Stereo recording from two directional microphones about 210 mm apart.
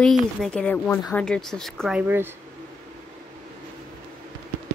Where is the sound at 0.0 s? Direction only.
Centre (ahead or behind).